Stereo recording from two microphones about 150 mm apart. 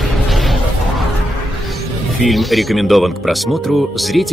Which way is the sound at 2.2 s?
Centre (ahead or behind).